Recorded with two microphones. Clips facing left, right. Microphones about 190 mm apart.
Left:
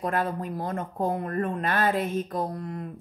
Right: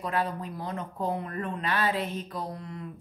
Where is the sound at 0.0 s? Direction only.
50° left (ahead or behind).